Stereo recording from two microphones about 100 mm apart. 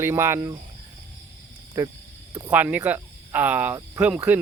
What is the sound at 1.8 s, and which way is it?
Speech, 25° right (ahead or behind).